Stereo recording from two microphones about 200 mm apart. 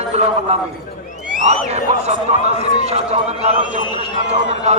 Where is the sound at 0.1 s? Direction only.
35° right (ahead or behind).